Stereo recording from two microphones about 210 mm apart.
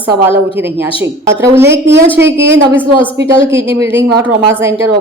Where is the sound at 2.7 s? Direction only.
25° left (ahead or behind).